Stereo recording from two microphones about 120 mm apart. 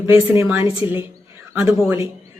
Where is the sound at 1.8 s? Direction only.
20° right (ahead or behind).